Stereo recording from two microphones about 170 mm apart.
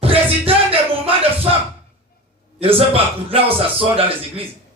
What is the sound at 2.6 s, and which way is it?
Speech, 35° right (ahead or behind).